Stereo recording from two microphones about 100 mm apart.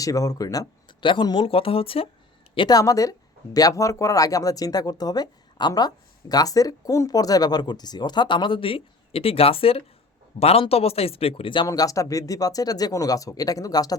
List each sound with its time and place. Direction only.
0.0 s speech: 35° left (ahead or behind)
0.9 s speech: 55° left (ahead or behind)
1.5 s speech: 70° left (ahead or behind)
2.6 s speech: 40° left (ahead or behind); by 9.8 s 70° left (ahead or behind)
10.4 s speech: 85° left; by 11.6 s 65° left (ahead or behind)
11.6 s speech: 35° left (ahead or behind)